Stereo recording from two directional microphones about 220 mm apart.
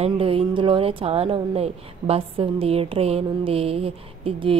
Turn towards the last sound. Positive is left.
turn(degrees=-25)  # may be behind; listen again after turning